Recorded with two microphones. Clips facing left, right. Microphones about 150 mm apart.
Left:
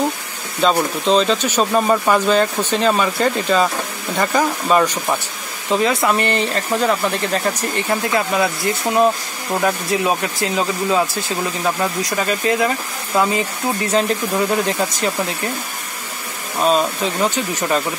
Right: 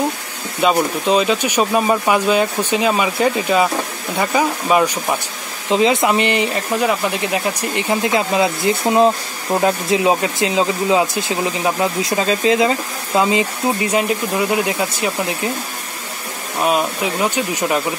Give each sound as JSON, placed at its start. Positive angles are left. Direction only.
{"t": 0.6, "sound": "speech", "side_deg": -10}
{"t": 16.5, "sound": "speech", "side_deg": -10}